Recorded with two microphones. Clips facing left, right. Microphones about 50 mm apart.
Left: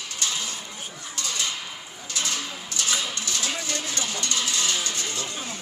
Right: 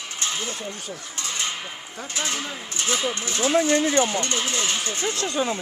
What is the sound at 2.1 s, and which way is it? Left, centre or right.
Speech, right.